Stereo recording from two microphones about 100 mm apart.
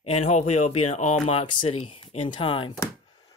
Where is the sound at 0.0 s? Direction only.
90° left; by 2.7 s 60° left (ahead or behind).